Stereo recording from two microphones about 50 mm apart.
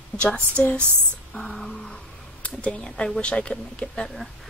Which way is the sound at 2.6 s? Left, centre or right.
Centre.